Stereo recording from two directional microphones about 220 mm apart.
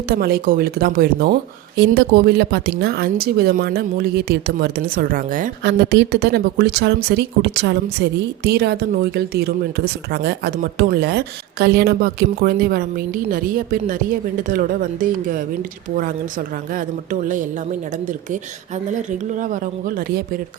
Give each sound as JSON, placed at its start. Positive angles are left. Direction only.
{"t": 0.1, "sound": "a woman's voice", "side_deg": -45}
{"t": 16.7, "sound": "speech", "side_deg": -35}
{"t": 18.9, "sound": "speech", "side_deg": -35}